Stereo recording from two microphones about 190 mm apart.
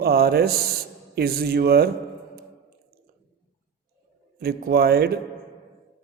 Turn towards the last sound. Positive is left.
turn(degrees=-55)  # may be behind; listen again after turning